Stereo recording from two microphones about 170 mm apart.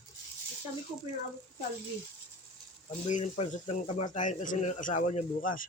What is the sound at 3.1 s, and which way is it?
Speech, 45° left (ahead or behind).